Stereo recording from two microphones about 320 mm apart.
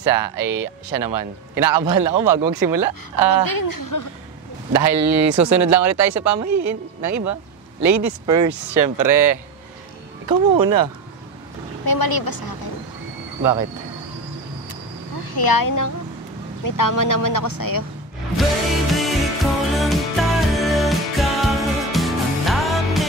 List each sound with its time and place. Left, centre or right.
0.1 s a man's voice: right
2.1 s speech: right
3.3 s a woman's voice: left
4.7 s speech: right
10.6 s a man's voice: right
11.8 s a woman's voice: left
13.4 s speech: right
15.4 s a woman's voice: left
18.4 s music: centre